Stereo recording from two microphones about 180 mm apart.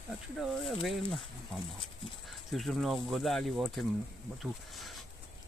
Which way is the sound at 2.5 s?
Centre (ahead or behind).